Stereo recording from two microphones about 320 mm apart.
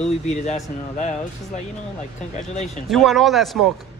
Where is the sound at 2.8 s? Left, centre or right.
Centre.